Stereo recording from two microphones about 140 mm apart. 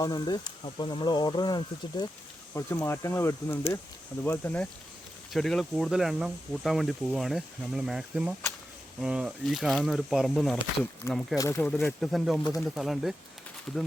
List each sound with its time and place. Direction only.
0.0 s speech: 30° left (ahead or behind)
2.5 s speech: 20° left (ahead or behind); by 10.6 s centre (ahead or behind)
11.0 s speech: 20° left (ahead or behind)
11.9 s speech: centre (ahead or behind)